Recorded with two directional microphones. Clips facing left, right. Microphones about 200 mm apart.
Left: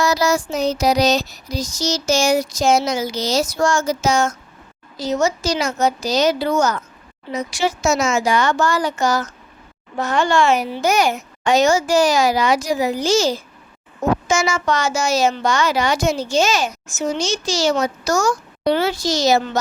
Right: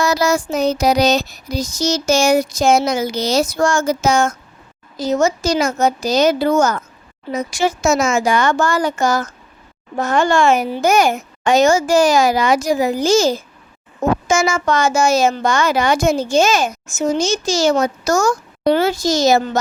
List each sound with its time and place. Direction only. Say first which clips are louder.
0.0 s child singing: right 1 dB; 55° right (ahead or behind)
4.9 s a woman's voice: right 3 dB; 50° right (ahead or behind)